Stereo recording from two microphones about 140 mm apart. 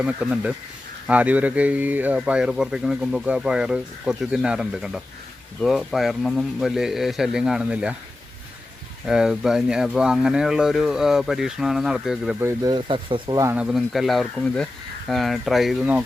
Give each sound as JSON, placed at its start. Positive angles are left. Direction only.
{"t": 0.0, "sound": "speech", "side_deg": -10}
{"t": 9.0, "sound": "speech", "side_deg": -5}
{"t": 12.4, "sound": "speech", "side_deg": -20}
{"t": 12.7, "sound": "speech", "side_deg": -35}
{"t": 13.3, "sound": "speech", "side_deg": -25}
{"t": 13.6, "sound": "speech", "side_deg": 0}